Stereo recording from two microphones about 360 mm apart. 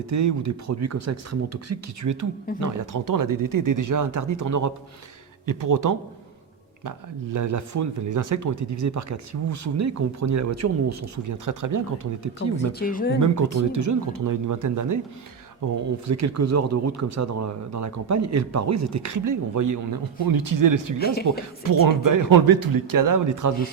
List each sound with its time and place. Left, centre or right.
0.1 s speech: right
7.3 s speech: right
12.8 s speech: left
13.1 s speech: right
16.0 s speech: right
21.0 s speech: left
21.6 s speech: right